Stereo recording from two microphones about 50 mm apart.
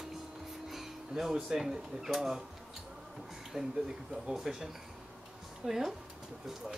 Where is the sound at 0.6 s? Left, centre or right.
Centre.